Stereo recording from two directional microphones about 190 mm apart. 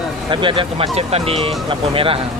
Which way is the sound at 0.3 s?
25° right (ahead or behind).